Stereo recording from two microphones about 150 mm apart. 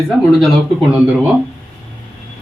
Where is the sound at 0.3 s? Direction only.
Centre (ahead or behind).